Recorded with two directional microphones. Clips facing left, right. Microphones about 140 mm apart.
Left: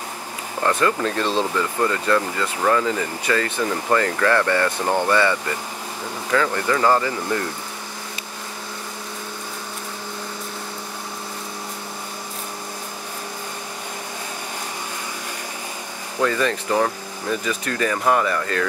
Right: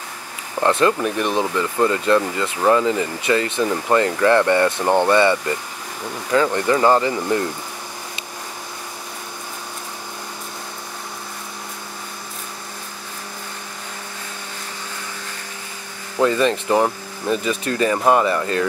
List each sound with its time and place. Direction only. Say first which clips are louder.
0.7 s speech: right 3 dB; 20° right (ahead or behind)
16.2 s speech: right 4 dB; 20° right (ahead or behind)